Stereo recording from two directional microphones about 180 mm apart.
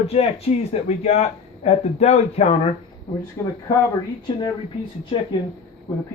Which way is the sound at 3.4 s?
25° left (ahead or behind).